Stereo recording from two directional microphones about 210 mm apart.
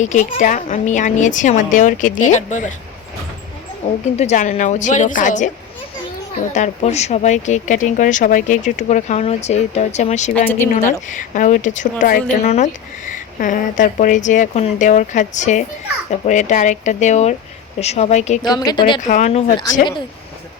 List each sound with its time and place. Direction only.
0.0 s speech: 35° left (ahead or behind)
4.2 s speech: 35° left (ahead or behind)
6.5 s speech: 35° left (ahead or behind)
18.4 s speech: 20° left (ahead or behind)
19.0 s speech: 35° left (ahead or behind)